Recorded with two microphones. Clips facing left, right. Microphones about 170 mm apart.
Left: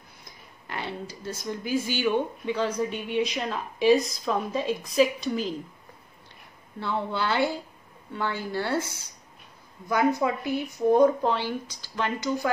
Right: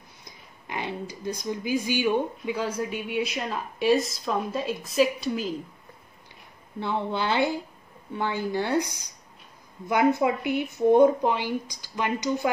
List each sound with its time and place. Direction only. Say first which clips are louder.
0.7 s speech: right 2 dB; 15° right (ahead or behind)
6.8 s speech: right 1 dB; 20° right (ahead or behind)